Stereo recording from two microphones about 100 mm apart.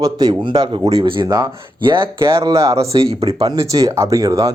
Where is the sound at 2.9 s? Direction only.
75° right (ahead or behind).